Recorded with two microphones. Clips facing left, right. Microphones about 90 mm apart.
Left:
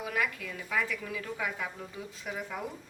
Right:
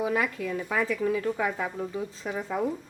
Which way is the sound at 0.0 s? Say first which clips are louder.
Right 6 dB; 25° right (ahead or behind).